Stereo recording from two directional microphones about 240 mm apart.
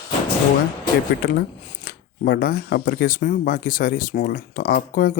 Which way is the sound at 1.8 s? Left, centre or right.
Left.